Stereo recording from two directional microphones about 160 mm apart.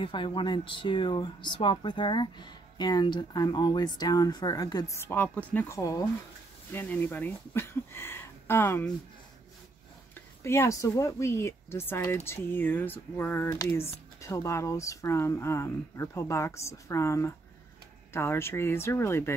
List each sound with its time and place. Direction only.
0.0 s speech: 30° left (ahead or behind); by 8.9 s 15° left (ahead or behind)
10.1 s speech: 15° left (ahead or behind)